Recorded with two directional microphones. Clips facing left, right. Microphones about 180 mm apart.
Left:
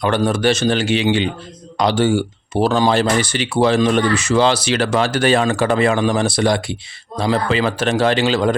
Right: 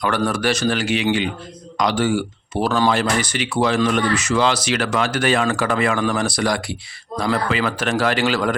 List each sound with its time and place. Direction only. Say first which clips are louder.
0.3 s speech: left 4 dB; 25° left (ahead or behind)